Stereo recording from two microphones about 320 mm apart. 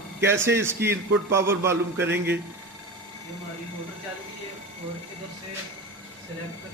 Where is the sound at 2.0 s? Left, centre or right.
Right.